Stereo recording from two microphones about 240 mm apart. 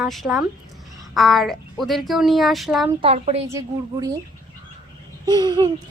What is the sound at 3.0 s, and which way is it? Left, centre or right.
Speech, right.